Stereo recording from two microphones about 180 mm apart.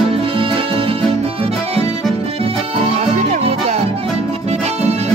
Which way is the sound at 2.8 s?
35° right (ahead or behind).